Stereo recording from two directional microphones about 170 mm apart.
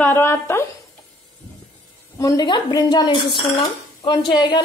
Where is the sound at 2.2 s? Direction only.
25° left (ahead or behind).